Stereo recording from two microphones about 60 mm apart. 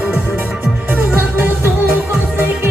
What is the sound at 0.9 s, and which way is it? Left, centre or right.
Music, right.